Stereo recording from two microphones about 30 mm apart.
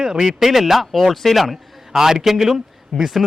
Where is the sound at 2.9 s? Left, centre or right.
Left.